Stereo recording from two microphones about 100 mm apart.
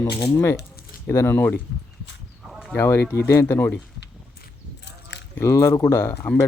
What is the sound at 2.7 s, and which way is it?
Speech, 30° left (ahead or behind).